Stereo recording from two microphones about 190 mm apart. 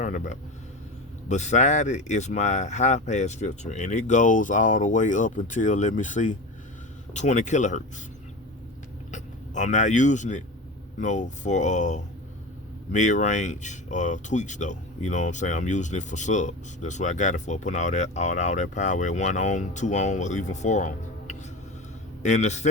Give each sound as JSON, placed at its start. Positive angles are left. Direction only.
{"t": 0.0, "sound": "speech", "side_deg": 40}
{"t": 9.1, "sound": "speech", "side_deg": 40}